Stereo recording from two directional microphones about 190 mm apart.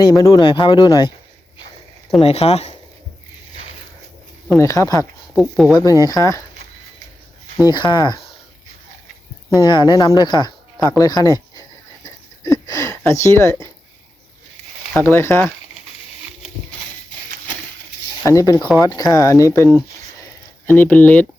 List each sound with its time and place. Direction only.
0.1 s speech: 20° left (ahead or behind)
2.2 s speech: 30° left (ahead or behind)
4.4 s speech: 15° left (ahead or behind)
5.3 s speech: centre (ahead or behind)
5.7 s speech: 15° left (ahead or behind)
7.7 s speech: 25° left (ahead or behind)
9.6 s speech: 25° left (ahead or behind)
12.0 s a sound: 20° left (ahead or behind)
14.9 s speech: 10° left (ahead or behind)
18.2 s speech: 15° left (ahead or behind)